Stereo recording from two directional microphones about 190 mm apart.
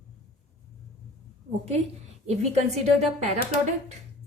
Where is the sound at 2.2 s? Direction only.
35° right (ahead or behind).